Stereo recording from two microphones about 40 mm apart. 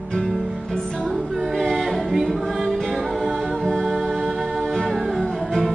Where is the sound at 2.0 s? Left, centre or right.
Centre.